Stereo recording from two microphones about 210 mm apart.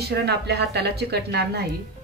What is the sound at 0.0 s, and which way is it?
Speech, 50° right (ahead or behind).